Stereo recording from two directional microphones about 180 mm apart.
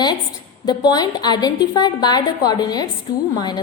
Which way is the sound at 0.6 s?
20° left (ahead or behind).